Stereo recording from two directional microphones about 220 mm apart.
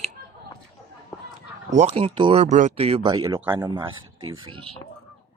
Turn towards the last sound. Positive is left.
turn(degrees=-25)  # may be behind; listen again after turning